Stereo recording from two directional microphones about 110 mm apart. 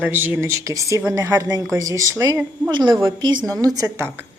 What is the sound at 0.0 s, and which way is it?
Speech, 15° right (ahead or behind).